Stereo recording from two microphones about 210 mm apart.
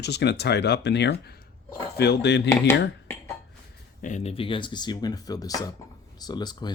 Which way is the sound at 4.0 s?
35° left (ahead or behind).